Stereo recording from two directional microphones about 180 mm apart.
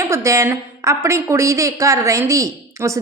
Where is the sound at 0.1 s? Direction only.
15° right (ahead or behind).